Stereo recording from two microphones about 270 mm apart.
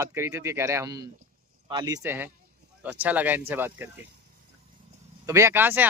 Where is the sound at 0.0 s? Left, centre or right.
Centre.